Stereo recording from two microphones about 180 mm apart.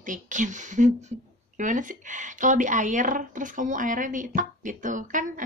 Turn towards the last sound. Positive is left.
turn(degrees=-45)  # may be behind; listen again after turning